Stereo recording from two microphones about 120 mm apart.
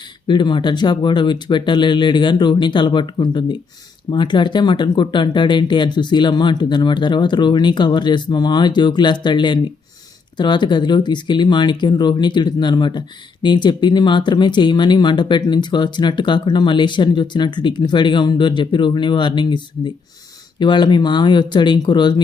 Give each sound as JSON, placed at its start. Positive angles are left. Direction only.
{"t": 0.3, "sound": "speech", "side_deg": 40}